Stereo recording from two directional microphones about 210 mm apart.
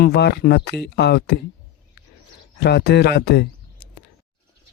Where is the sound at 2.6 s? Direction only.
50° left (ahead or behind).